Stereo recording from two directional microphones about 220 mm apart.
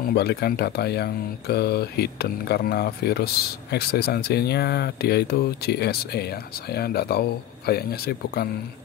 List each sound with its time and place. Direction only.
0.1 s speech: 45° left (ahead or behind)